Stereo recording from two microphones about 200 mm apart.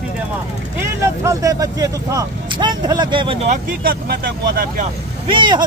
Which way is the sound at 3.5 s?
45° right (ahead or behind).